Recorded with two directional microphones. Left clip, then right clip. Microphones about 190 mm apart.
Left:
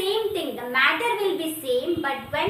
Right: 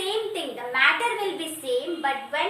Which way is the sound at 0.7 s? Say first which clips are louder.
Even; 15° right (ahead or behind).